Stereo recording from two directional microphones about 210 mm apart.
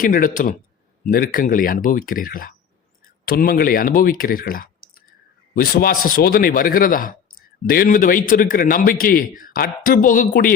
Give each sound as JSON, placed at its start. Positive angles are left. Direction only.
{"t": 0.0, "sound": "speech", "side_deg": 40}